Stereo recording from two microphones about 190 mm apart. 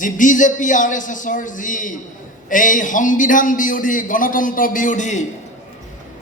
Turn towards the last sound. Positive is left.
turn(degrees=40)  # may be behind; listen again after turning